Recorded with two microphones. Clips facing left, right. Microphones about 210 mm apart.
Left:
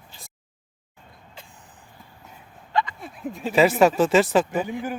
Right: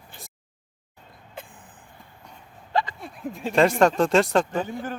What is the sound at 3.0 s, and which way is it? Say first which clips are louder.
Speech: left 1 dB; centre (ahead or behind).